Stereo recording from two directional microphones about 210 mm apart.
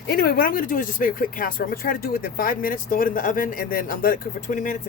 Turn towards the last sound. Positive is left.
turn(degrees=40)  # may be behind; listen again after turning